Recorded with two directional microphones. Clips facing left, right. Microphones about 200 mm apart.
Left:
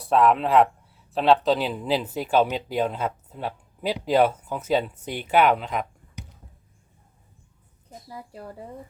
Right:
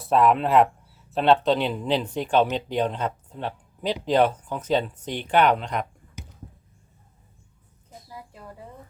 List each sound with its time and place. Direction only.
0.0 s speech: centre (ahead or behind)
8.3 s speech: 35° left (ahead or behind)